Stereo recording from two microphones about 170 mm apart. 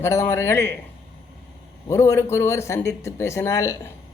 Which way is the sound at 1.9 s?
15° left (ahead or behind).